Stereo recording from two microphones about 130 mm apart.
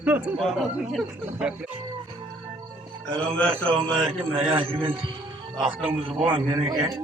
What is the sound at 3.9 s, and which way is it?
A man's voice, 45° right (ahead or behind).